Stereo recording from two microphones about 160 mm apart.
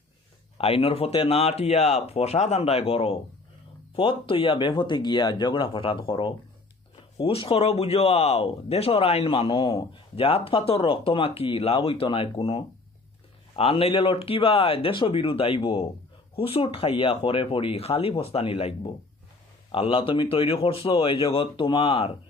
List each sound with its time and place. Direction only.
0.6 s speech: 35° left (ahead or behind)